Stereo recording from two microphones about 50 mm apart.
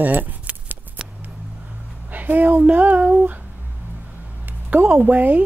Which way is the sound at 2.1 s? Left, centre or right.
Right.